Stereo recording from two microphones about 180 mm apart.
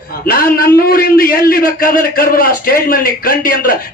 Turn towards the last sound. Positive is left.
turn(degrees=55)  # may be behind; listen again after turning